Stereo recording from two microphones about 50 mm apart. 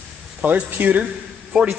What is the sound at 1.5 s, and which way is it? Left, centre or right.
Speech, centre.